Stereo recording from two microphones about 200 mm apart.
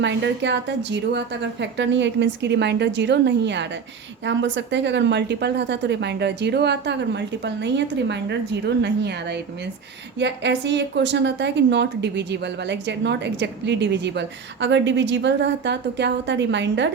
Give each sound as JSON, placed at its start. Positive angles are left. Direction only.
{"t": 0.0, "sound": "a woman's voice", "side_deg": -65}